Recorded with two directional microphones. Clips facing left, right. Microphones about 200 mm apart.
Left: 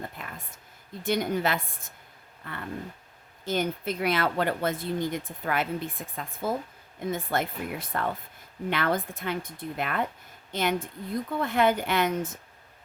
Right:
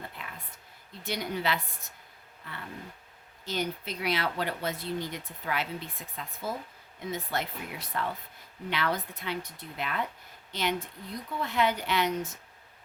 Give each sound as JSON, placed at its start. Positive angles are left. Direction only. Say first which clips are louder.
{"t": 0.2, "sound": "a sound", "louder": "left 3 dB", "side_deg": 45}
{"t": 1.0, "sound": "speech", "louder": "left 5 dB", "side_deg": 50}
{"t": 3.4, "sound": "speech", "louder": "left 5 dB", "side_deg": 50}